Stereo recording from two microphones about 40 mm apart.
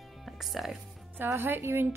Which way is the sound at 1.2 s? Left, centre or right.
Right.